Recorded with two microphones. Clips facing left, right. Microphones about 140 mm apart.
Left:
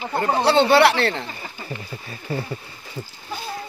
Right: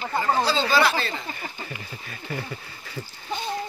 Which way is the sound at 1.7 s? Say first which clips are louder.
Left 4 dB; 30° left (ahead or behind).